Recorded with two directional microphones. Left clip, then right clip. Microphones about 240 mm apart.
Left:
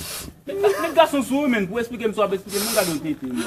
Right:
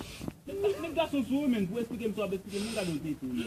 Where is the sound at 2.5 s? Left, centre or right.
Centre.